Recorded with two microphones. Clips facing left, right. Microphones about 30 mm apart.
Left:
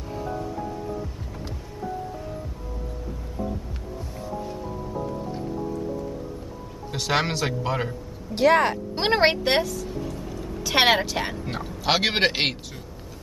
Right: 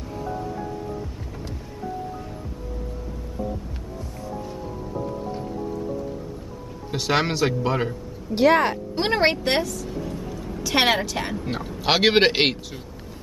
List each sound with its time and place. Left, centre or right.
6.9 s speech: centre
8.9 s a woman's voice: centre
10.0 s vehicle: centre
10.6 s speech: centre